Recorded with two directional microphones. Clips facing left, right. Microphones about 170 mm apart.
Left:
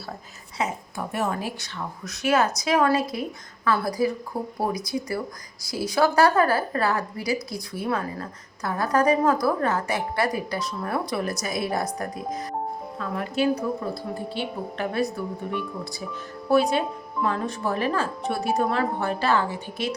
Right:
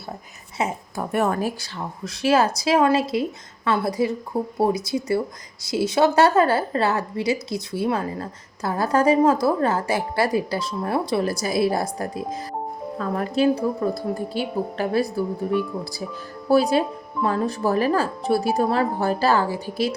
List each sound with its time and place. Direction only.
0.6 s a woman's voice: 25° right (ahead or behind)
1.1 s speech: 50° right (ahead or behind)
1.6 s a woman's voice: 30° right (ahead or behind)